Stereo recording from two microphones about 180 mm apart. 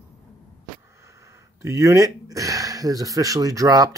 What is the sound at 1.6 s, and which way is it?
Speech, 15° right (ahead or behind).